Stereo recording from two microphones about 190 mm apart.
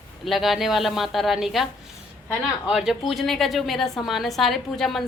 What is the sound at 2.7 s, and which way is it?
Speech, 5° right (ahead or behind).